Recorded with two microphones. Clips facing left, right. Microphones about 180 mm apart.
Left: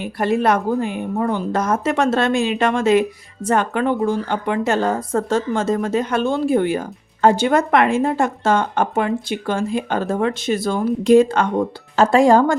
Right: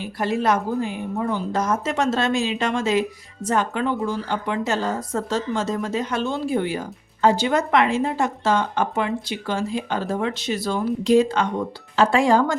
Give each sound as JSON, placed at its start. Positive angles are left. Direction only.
{"t": 0.0, "sound": "a woman's voice", "side_deg": 60}